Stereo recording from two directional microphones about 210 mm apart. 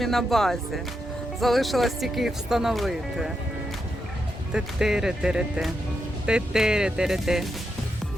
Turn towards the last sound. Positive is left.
turn(degrees=0)  # may be behind; listen again after turning